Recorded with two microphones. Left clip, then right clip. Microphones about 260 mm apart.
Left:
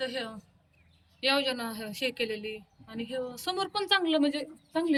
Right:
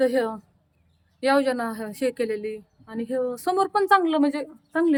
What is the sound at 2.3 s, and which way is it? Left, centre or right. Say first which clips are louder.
Speech: right 7 dB; right.